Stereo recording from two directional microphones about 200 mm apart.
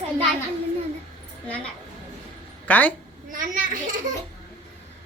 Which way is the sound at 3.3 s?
40° right (ahead or behind).